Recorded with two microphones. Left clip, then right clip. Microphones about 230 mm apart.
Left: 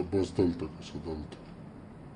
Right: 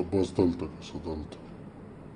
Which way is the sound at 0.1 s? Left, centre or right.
Centre.